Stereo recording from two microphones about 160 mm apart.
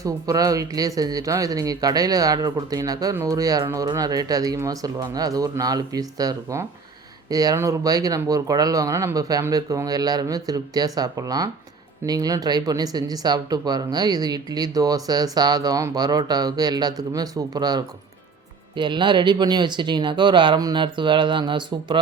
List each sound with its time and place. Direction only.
0.0 s speech: 20° right (ahead or behind)